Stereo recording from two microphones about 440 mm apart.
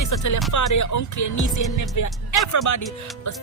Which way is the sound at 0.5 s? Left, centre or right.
Left.